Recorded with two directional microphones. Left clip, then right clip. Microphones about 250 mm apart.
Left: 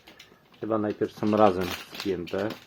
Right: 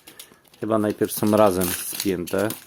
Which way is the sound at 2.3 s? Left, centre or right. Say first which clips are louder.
Right 7 dB; right.